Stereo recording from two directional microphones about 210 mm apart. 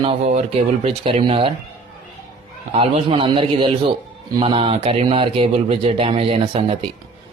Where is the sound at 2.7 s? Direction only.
25° right (ahead or behind).